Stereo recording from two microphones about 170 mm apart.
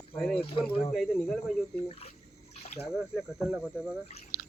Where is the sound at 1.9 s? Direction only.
35° left (ahead or behind).